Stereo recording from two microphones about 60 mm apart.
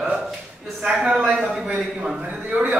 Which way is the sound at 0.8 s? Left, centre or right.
Centre.